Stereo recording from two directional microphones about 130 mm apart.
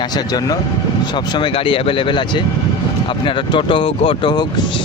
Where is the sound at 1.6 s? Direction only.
40° left (ahead or behind).